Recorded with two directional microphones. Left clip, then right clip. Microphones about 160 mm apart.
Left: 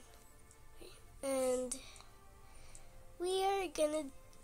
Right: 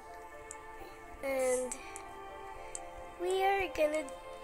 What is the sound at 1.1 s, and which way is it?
Speech, 10° left (ahead or behind).